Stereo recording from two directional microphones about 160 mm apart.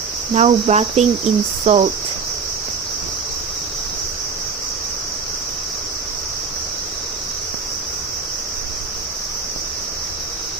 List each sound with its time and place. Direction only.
0.3 s speech: 45° right (ahead or behind)
1.6 s cricket: 40° right (ahead or behind)